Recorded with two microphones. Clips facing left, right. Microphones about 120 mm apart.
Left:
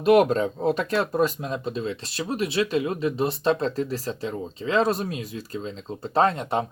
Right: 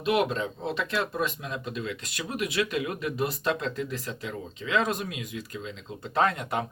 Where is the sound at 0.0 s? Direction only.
45° left (ahead or behind).